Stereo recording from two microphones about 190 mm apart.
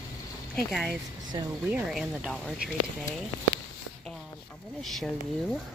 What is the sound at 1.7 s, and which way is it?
Speech, 5° right (ahead or behind).